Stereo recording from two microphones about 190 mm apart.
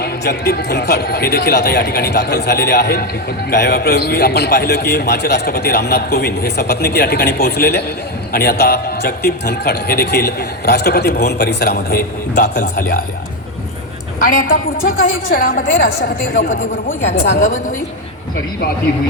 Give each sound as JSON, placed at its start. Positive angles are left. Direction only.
{"t": 0.0, "sound": "a man's voice", "side_deg": 55}
{"t": 14.2, "sound": "a woman's voice", "side_deg": 45}